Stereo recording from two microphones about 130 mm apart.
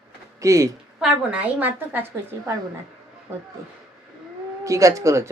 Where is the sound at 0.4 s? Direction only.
25° right (ahead or behind).